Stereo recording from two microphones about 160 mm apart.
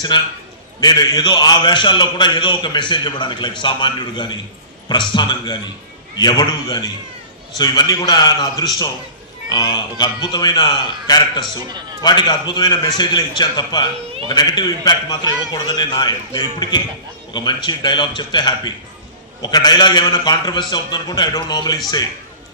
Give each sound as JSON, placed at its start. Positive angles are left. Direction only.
{"t": 0.1, "sound": "a man's voice", "side_deg": 30}